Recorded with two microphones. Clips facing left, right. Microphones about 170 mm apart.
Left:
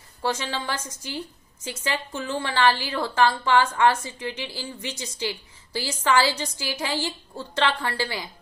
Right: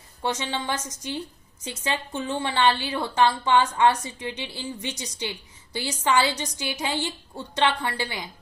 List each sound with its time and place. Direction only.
0.2 s a woman's voice: 20° right (ahead or behind)